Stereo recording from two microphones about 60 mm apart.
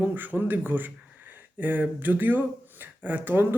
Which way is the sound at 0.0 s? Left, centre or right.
Right.